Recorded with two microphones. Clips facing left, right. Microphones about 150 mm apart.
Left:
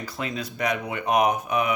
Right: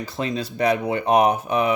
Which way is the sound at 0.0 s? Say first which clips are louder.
Right 5 dB; 25° right (ahead or behind).